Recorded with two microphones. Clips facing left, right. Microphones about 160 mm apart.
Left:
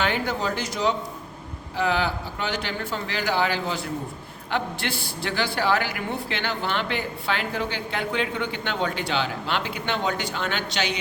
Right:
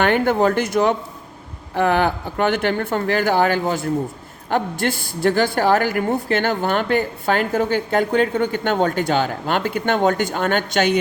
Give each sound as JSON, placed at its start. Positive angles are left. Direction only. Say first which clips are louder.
{"t": 0.0, "sound": "a woman's voice", "louder": "right 9 dB", "side_deg": -55}